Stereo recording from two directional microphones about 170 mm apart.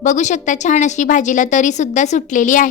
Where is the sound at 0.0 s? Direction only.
45° left (ahead or behind).